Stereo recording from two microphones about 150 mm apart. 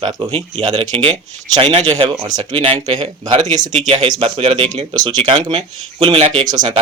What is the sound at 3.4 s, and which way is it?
Speech, 55° right (ahead or behind).